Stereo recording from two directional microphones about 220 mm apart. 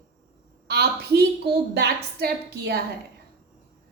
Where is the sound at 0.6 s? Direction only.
45° right (ahead or behind).